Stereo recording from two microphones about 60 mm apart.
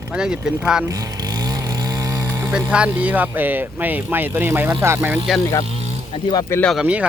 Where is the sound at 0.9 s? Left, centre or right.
Right.